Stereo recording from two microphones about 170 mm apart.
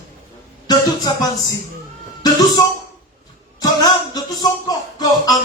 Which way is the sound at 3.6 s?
20° left (ahead or behind).